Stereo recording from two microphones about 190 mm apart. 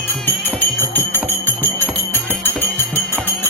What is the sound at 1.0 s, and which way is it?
Music, 10° right (ahead or behind).